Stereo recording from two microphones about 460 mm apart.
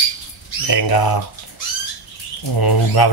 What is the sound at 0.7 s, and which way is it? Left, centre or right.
Speech, left.